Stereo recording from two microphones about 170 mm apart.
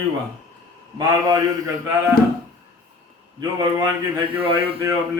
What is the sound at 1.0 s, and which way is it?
Speech, 20° right (ahead or behind).